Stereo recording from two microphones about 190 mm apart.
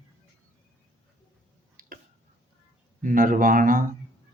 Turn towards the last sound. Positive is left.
turn(degrees=-45)  # may be behind; listen again after turning